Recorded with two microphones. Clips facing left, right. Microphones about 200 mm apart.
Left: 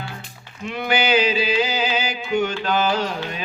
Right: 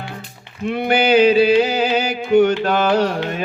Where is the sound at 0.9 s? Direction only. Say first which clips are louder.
Right 6 dB; 60° right (ahead or behind).